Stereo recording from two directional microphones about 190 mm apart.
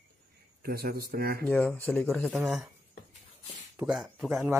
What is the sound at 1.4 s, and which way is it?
Speech, 5° left (ahead or behind).